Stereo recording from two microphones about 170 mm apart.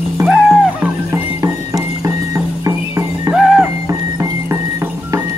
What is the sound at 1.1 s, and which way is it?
Music, 20° right (ahead or behind).